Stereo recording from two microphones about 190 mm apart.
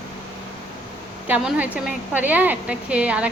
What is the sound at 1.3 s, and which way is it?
A woman's voice, 10° right (ahead or behind).